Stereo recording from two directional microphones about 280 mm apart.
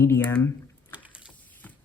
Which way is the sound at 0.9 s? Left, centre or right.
Centre.